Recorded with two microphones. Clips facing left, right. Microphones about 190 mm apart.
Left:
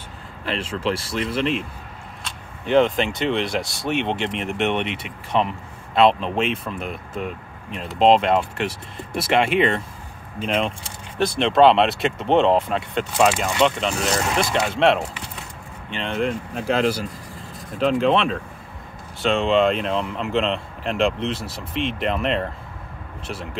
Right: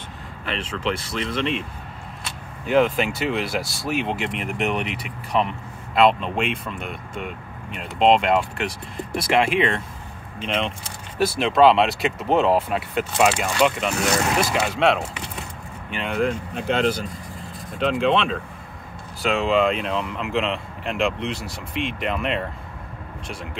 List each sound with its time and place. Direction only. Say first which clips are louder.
0.5 s speech: left 2 dB; 30° left (ahead or behind)
1.1 s speech: left 3 dB; 5° left (ahead or behind)
3.0 s speech: left 1 dB; 5° right (ahead or behind)